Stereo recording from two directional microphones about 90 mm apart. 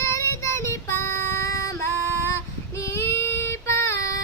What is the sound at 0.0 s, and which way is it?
Child singing, 35° left (ahead or behind).